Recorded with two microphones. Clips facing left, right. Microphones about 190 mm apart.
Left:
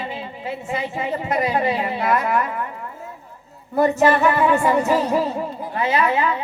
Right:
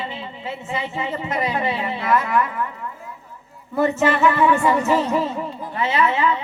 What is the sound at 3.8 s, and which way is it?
Music, 50° left (ahead or behind).